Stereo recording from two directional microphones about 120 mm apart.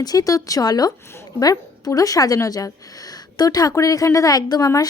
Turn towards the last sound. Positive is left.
turn(degrees=30)  # may be behind; listen again after turning